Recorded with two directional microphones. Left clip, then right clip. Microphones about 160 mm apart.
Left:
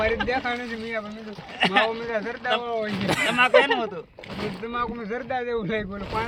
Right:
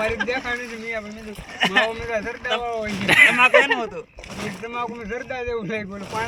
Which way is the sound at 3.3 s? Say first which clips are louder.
Right 3 dB; 35° left (ahead or behind).